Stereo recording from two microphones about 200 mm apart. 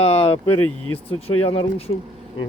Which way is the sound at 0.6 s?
90° left.